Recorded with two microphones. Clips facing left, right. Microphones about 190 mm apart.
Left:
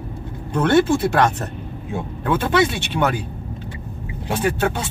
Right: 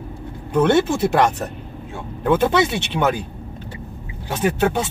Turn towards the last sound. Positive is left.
turn(degrees=-20)  # may be behind; listen again after turning